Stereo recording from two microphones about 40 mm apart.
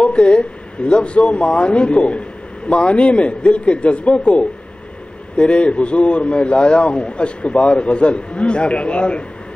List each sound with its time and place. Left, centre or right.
0.0 s a man's voice: left